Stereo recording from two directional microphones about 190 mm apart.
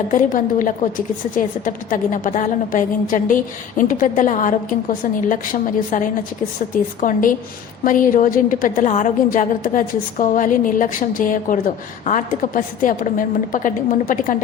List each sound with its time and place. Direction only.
0.1 s a woman's voice: 45° left (ahead or behind)